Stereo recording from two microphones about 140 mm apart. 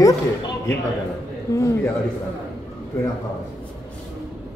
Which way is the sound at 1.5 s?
20° left (ahead or behind).